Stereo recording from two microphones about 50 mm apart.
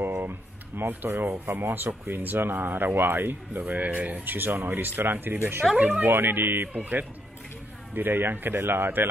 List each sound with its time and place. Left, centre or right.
0.2 s music: right
1.3 s speech: right
5.8 s speech: right
6.0 s speech: right
6.7 s speech: right